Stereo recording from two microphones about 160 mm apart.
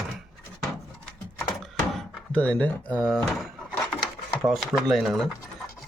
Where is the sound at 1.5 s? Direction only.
Centre (ahead or behind).